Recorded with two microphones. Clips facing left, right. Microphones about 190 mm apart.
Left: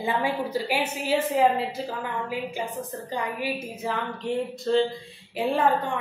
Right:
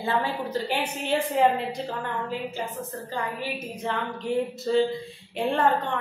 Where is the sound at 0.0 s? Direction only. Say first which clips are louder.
Left 1 dB; 15° left (ahead or behind).